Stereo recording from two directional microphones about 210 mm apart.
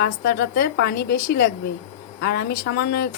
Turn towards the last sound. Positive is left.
turn(degrees=50)  # may be behind; listen again after turning